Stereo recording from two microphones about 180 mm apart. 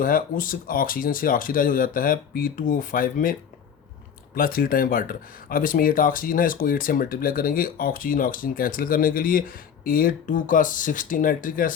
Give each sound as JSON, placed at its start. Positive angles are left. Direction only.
{"t": 0.0, "sound": "speech", "side_deg": 50}
{"t": 4.4, "sound": "speech", "side_deg": 50}